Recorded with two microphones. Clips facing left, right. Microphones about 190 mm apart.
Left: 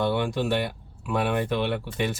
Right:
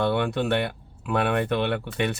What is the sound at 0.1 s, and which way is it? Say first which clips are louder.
Speech: right 1 dB; 60° right (ahead or behind).